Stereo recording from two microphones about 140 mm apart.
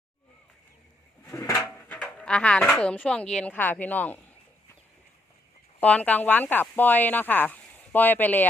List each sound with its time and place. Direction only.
1.3 s bird: 25° left (ahead or behind)
1.9 s dog: 10° left (ahead or behind)
2.8 s speech: 10° left (ahead or behind)
5.8 s speech: 10° left (ahead or behind)